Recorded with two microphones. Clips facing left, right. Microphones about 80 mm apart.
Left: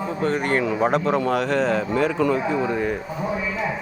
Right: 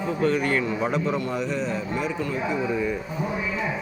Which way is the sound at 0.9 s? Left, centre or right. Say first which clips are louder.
Left 5 dB; left.